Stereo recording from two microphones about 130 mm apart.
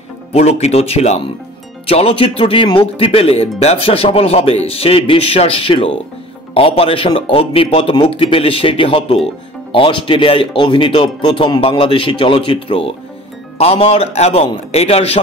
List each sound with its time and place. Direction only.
0.3 s speech: 55° left (ahead or behind)